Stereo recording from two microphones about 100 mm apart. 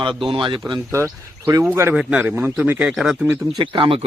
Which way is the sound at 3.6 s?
60° right (ahead or behind).